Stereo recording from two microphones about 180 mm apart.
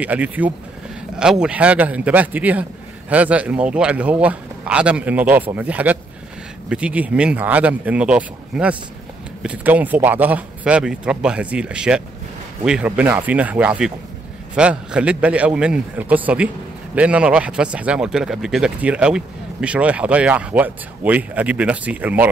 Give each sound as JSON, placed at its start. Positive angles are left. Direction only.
{"t": 0.0, "sound": "speech", "side_deg": -10}